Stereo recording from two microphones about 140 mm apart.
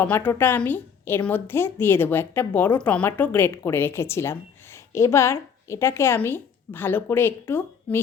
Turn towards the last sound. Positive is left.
turn(degrees=15)  # may be behind; listen again after turning